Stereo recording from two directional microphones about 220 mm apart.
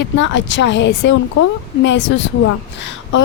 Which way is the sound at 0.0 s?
55° left (ahead or behind).